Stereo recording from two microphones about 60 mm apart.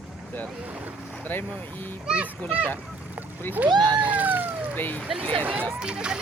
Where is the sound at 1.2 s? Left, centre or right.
Left.